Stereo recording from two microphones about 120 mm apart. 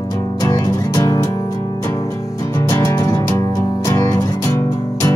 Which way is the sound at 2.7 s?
25° left (ahead or behind).